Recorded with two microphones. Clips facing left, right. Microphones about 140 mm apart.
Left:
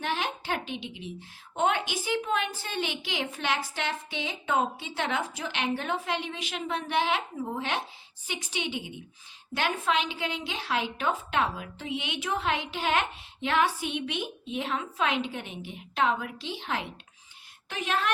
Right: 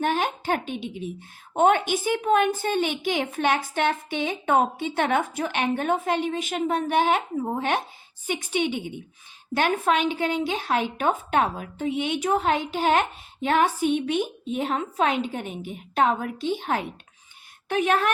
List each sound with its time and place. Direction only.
0.0 s a woman's voice: 50° right (ahead or behind)